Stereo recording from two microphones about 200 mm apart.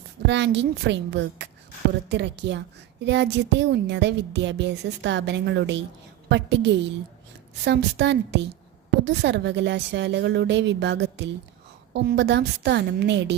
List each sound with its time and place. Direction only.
0.3 s a woman's voice: 60° right (ahead or behind)